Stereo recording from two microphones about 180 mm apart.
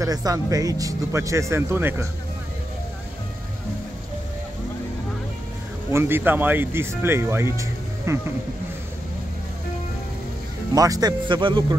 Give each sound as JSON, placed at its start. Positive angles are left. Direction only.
{"t": 0.0, "sound": "speech", "side_deg": -20}
{"t": 5.9, "sound": "speech", "side_deg": -15}
{"t": 10.7, "sound": "speech", "side_deg": -20}